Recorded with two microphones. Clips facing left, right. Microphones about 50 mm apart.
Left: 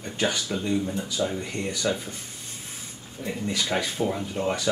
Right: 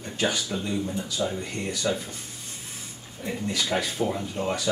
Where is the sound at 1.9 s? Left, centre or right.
Centre.